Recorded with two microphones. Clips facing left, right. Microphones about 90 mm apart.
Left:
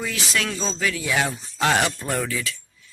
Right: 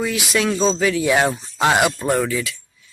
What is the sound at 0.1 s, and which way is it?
Speech, 15° right (ahead or behind).